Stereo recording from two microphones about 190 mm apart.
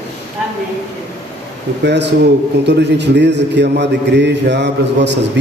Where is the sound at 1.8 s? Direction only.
65° right (ahead or behind).